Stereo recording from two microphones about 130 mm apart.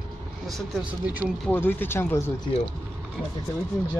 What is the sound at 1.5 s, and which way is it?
Speech, 15° left (ahead or behind).